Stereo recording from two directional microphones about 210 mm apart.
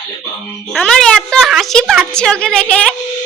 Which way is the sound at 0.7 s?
Centre (ahead or behind).